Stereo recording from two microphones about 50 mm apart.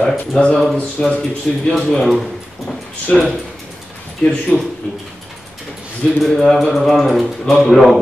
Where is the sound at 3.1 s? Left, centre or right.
Centre.